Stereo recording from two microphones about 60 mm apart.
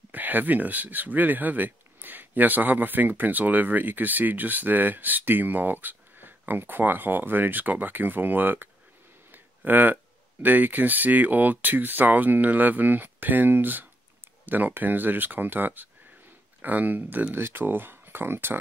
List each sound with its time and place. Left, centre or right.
0.1 s speech: right
9.3 s a sound: right
10.4 s speech: right